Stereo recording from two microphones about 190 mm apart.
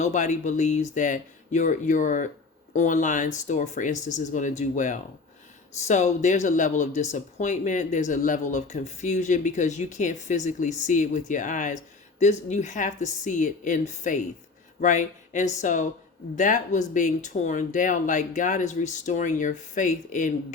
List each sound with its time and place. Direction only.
0.0 s speech: 40° left (ahead or behind)